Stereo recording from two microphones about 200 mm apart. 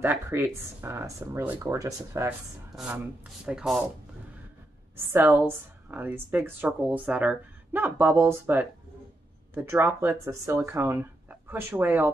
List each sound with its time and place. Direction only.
0.0 s a woman's voice: 10° right (ahead or behind)
2.7 s speech: 5° right (ahead or behind)
4.9 s a woman's voice: 10° right (ahead or behind)